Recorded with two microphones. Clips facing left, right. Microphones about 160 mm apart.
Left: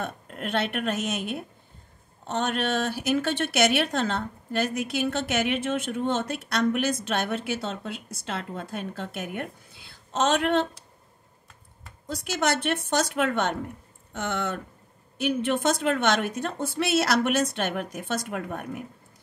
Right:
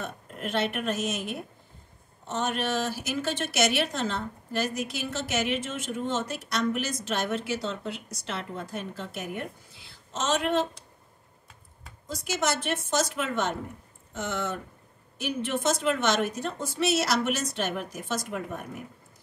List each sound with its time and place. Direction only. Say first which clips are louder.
0.0 s speech: left 2 dB; 60° left (ahead or behind)
12.1 s speech: left 2 dB; 60° left (ahead or behind)